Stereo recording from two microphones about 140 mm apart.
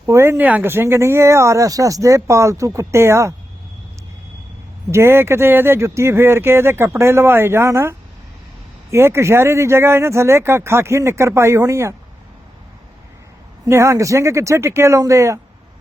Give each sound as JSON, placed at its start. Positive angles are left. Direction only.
{"t": 0.0, "sound": "speech", "side_deg": -20}
{"t": 4.9, "sound": "speech", "side_deg": -20}
{"t": 13.7, "sound": "speech", "side_deg": -20}